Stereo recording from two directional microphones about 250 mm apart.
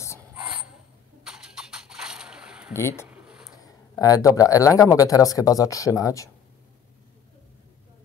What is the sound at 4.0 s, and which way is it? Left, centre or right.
Speech, centre.